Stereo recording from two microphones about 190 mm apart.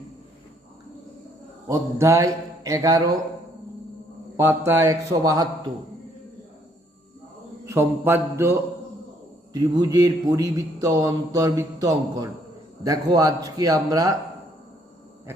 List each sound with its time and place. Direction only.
1.6 s speech: 15° right (ahead or behind)
4.4 s speech: 10° right (ahead or behind)
7.6 s a man's voice: 15° right (ahead or behind)